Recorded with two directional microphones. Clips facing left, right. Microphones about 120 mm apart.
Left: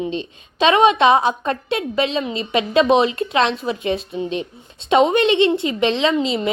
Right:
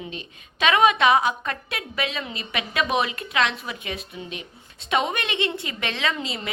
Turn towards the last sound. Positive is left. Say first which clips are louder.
# left 10 dB
turn(degrees=25)  # may be behind; listen again after turning